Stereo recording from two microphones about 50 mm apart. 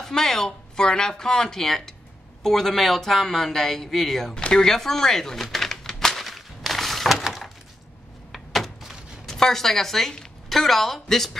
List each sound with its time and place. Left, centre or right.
0.0 s speech: centre
4.4 s a sound: centre
10.5 s speech: centre